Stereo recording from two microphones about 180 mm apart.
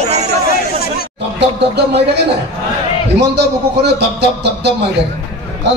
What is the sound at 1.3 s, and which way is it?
A man's voice, 65° right (ahead or behind).